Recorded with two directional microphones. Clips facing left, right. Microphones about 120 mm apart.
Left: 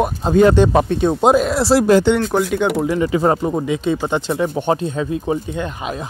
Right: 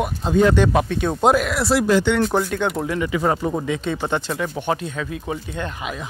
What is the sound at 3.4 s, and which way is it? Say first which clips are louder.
Speech: left 4 dB; 15° left (ahead or behind).